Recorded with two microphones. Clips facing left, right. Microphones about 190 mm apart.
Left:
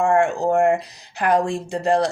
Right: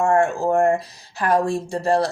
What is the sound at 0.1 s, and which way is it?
Speech, 15° left (ahead or behind).